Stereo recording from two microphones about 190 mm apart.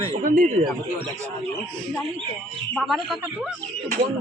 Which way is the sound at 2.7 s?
5° left (ahead or behind).